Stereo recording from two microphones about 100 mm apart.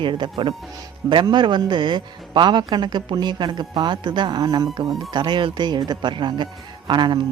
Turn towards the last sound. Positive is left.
turn(degrees=-50)  # may be behind; listen again after turning